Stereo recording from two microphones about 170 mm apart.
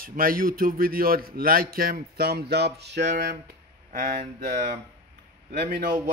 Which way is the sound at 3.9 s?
50° right (ahead or behind).